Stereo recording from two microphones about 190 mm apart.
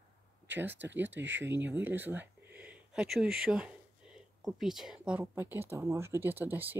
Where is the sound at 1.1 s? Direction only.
75° right (ahead or behind).